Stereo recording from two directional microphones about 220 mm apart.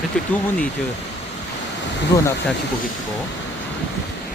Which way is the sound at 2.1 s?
15° left (ahead or behind).